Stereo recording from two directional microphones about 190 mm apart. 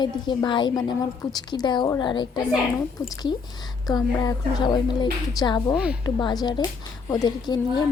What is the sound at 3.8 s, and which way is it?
A woman's voice, 20° left (ahead or behind).